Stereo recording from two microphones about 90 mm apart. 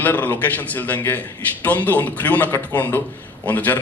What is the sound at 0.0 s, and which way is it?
A man's voice, 20° left (ahead or behind).